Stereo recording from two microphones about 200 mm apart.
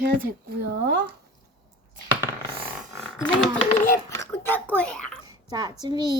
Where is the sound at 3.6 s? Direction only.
35° left (ahead or behind).